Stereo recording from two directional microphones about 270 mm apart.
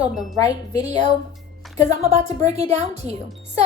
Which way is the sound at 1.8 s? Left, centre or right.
Right.